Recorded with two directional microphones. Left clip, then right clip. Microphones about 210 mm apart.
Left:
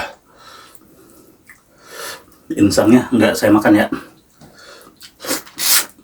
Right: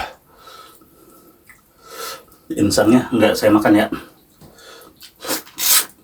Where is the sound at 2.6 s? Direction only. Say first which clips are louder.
Left 2 dB; centre (ahead or behind).